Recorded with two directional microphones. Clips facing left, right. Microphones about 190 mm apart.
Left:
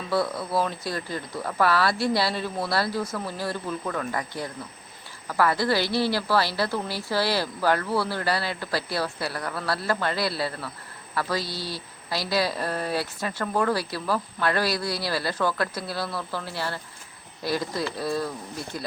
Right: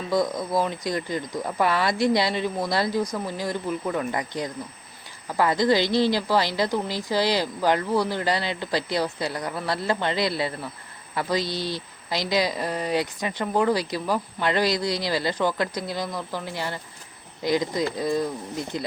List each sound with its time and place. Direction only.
0.1 s a woman's voice: 15° right (ahead or behind)